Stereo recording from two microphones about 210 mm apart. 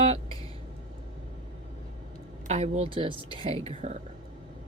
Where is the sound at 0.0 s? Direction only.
30° right (ahead or behind).